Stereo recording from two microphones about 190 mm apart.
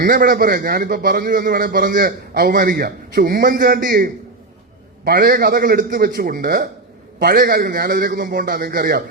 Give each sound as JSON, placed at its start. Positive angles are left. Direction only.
{"t": 0.0, "sound": "a man's voice", "side_deg": -50}